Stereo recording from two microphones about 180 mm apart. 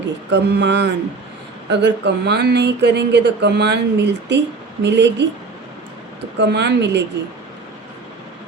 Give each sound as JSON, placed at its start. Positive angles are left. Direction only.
{"t": 0.0, "sound": "speech", "side_deg": -75}
{"t": 6.4, "sound": "speech", "side_deg": -75}